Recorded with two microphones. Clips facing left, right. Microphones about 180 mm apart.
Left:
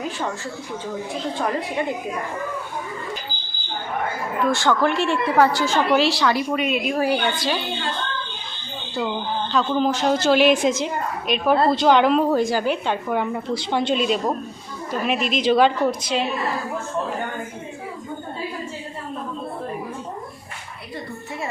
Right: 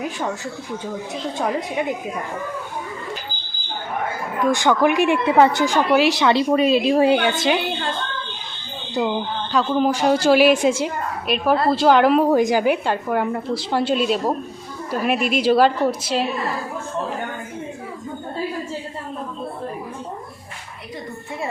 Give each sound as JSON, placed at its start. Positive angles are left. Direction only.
{"t": 4.4, "sound": "a woman's voice", "side_deg": -15}
{"t": 6.5, "sound": "a woman's voice", "side_deg": -35}
{"t": 9.5, "sound": "a woman's voice", "side_deg": -5}